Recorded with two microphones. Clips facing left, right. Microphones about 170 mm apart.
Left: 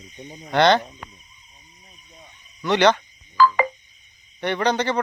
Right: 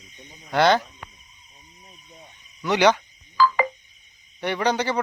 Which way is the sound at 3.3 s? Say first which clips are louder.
Left 2 dB; 55° left (ahead or behind).